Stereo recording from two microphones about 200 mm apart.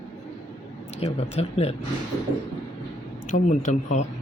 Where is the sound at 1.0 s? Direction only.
30° left (ahead or behind).